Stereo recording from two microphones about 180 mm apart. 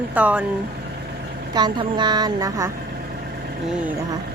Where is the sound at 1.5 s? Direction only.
25° right (ahead or behind).